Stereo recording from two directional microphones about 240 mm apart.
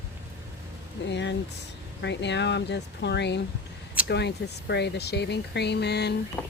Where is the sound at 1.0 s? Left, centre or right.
Left.